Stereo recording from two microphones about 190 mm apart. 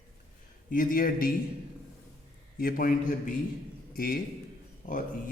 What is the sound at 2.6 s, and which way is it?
A man's voice, 50° left (ahead or behind).